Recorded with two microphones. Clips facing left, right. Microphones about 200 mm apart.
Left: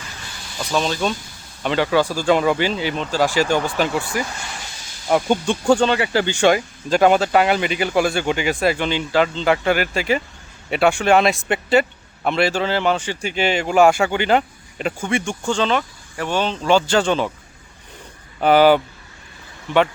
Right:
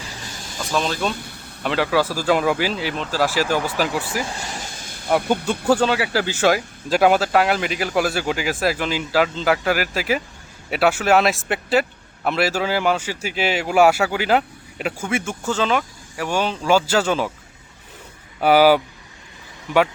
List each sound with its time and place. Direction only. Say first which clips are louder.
0.0 s vehicle: right 3 dB; 45° right (ahead or behind)
0.6 s speech: left 2 dB; centre (ahead or behind)
1.1 s speech: left 1 dB; 60° right (ahead or behind)
1.6 s speech: left 2 dB; centre (ahead or behind)
4.4 s vehicle: right 3 dB; 45° right (ahead or behind)
5.6 s speech: left 2 dB; 5° right (ahead or behind)
18.3 s speech: left 1 dB; 5° right (ahead or behind)